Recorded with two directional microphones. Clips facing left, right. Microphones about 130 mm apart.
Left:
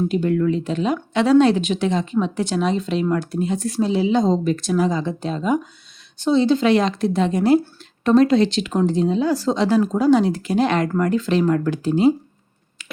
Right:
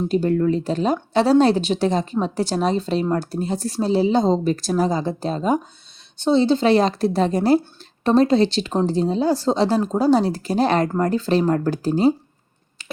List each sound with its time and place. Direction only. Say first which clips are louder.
0.1 s a woman's voice: right 1 dB; 35° right (ahead or behind)